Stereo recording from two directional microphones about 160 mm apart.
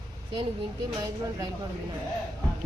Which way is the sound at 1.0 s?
25° right (ahead or behind).